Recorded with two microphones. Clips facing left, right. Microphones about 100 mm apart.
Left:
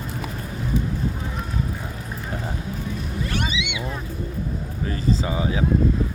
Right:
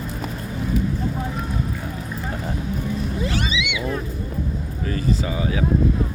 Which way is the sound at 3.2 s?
90° right.